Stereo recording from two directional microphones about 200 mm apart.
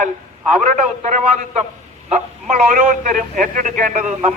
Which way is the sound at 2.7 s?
40° right (ahead or behind).